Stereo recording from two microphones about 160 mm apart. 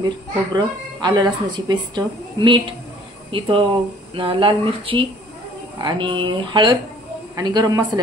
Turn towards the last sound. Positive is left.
turn(degrees=-25)  # may be behind; listen again after turning